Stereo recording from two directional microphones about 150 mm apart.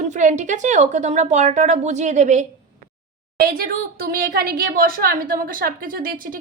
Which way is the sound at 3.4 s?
85° right.